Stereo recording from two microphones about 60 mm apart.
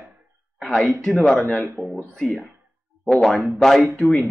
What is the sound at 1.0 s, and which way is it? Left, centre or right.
Speech, centre.